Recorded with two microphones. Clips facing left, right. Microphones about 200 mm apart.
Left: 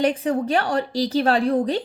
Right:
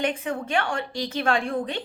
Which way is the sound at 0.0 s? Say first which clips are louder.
Left 6 dB; 35° left (ahead or behind).